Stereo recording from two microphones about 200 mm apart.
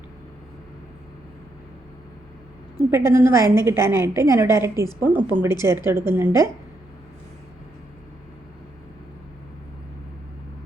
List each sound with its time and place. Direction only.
2.9 s a woman's voice: 15° right (ahead or behind)